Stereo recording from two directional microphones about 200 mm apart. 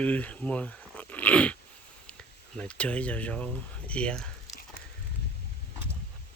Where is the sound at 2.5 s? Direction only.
5° left (ahead or behind).